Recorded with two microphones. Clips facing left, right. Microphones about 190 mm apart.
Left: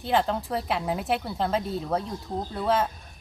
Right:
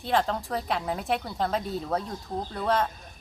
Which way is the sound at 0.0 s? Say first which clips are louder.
Left 1 dB; centre (ahead or behind).